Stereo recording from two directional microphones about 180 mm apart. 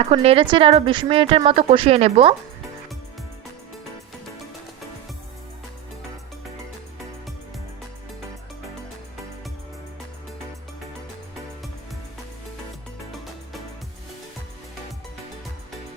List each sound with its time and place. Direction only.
0.0 s speech: 35° right (ahead or behind)